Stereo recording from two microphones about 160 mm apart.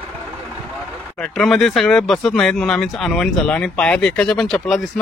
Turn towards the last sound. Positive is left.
turn(degrees=0)  # may be behind; listen again after turning